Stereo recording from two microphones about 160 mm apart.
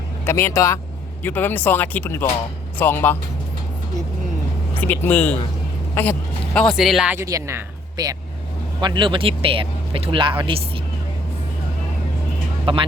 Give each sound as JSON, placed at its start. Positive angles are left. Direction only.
{"t": 0.3, "sound": "speech", "side_deg": 15}
{"t": 4.8, "sound": "speech", "side_deg": 10}
{"t": 7.2, "sound": "speech", "side_deg": -20}
{"t": 12.7, "sound": "speech", "side_deg": -35}